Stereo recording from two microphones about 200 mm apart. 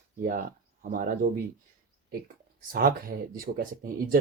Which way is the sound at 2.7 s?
45° right (ahead or behind).